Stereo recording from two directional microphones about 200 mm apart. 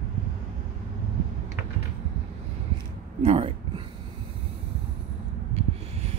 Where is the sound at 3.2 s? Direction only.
25° right (ahead or behind).